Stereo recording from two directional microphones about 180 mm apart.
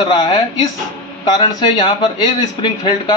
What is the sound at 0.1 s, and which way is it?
Speech, 25° left (ahead or behind).